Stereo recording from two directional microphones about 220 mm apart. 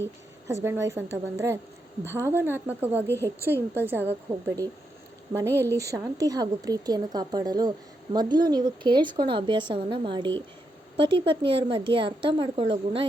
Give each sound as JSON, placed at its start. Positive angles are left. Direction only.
{"t": 0.4, "sound": "a woman's voice", "side_deg": -10}